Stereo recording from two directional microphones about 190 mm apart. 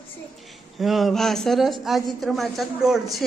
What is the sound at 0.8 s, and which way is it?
Speech, centre (ahead or behind).